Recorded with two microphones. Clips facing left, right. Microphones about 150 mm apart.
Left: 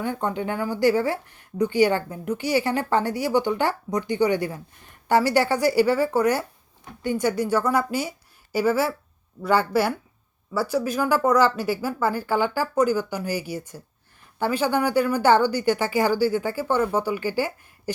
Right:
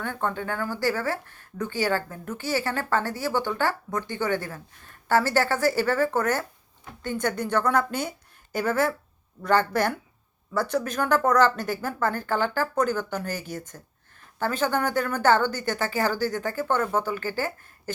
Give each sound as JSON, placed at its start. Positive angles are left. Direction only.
{"t": 0.0, "sound": "speech", "side_deg": 15}